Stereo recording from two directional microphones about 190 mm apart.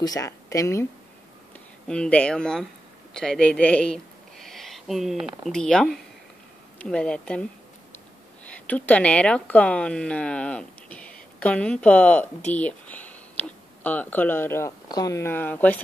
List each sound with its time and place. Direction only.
0.0 s speech: 20° left (ahead or behind)
1.9 s speech: 5° left (ahead or behind)
8.5 s speech: 10° left (ahead or behind)